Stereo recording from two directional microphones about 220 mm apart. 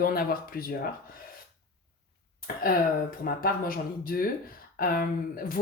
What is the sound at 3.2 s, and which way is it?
Speech, 40° left (ahead or behind).